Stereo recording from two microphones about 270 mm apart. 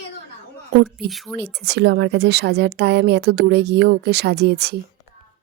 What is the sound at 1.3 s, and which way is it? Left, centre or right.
A woman's voice, right.